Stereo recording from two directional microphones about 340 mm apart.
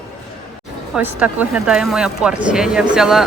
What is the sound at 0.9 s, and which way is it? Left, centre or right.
Speech, centre.